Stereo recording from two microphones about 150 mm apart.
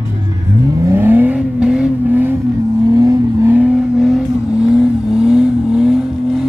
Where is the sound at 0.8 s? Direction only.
15° right (ahead or behind).